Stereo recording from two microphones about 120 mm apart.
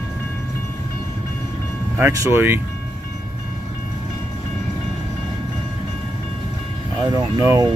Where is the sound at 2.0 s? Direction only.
20° right (ahead or behind).